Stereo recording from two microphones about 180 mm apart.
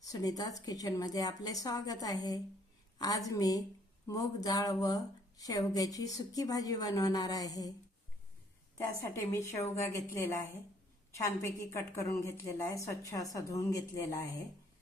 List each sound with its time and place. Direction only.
0.1 s speech: 20° left (ahead or behind)
8.8 s a woman's voice: 15° left (ahead or behind)
11.1 s a woman's voice: 15° left (ahead or behind)